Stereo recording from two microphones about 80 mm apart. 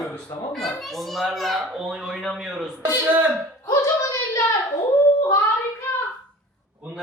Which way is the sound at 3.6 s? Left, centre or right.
Left.